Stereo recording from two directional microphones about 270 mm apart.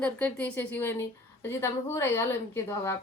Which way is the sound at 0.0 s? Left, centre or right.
Centre.